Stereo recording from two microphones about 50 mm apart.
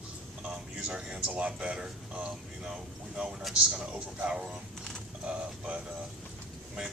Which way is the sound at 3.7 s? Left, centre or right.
Right.